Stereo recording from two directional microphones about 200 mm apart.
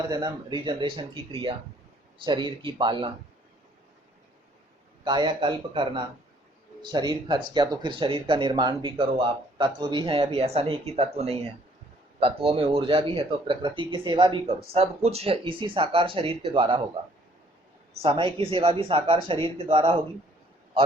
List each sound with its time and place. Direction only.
0.1 s speech: 20° right (ahead or behind)
5.0 s speech: 20° right (ahead or behind)
18.0 s speech: 25° right (ahead or behind)